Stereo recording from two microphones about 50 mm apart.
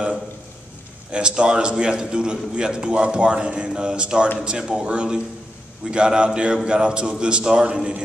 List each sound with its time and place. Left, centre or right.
1.1 s a man's voice: centre